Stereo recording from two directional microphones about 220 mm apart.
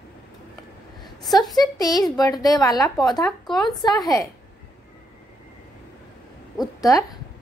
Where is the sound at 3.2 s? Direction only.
Centre (ahead or behind).